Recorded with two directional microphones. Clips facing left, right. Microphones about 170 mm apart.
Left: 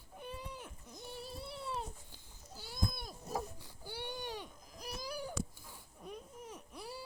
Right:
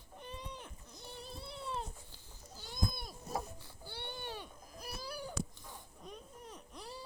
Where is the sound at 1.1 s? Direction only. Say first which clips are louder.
Left 1 dB; 10° left (ahead or behind).